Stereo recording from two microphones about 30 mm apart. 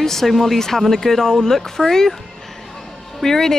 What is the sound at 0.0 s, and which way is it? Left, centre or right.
Speech, centre.